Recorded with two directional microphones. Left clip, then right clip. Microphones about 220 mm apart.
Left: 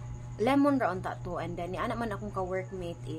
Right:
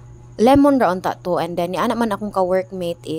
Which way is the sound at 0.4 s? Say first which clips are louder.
Right 13 dB; 40° right (ahead or behind).